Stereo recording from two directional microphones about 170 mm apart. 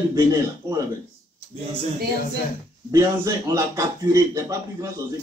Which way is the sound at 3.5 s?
20° right (ahead or behind).